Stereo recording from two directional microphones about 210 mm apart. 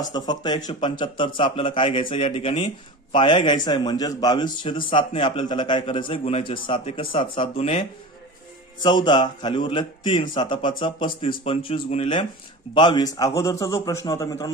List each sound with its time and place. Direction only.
0.0 s speech: 20° left (ahead or behind)
8.8 s a man's voice: 20° left (ahead or behind)